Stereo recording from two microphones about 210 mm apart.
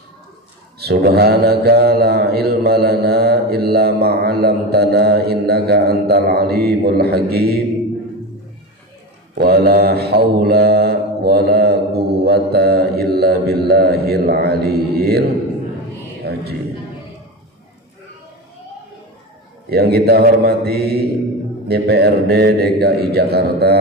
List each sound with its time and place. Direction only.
0.7 s mantra: 50° right (ahead or behind)
9.3 s mantra: 50° right (ahead or behind)
16.2 s a sound: 50° right (ahead or behind)
19.7 s mantra: 50° right (ahead or behind)